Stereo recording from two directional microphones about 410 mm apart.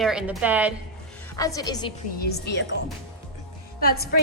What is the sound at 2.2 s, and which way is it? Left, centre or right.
Speech, left.